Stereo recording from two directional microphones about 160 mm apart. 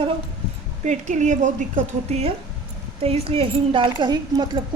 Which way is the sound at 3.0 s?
40° right (ahead or behind).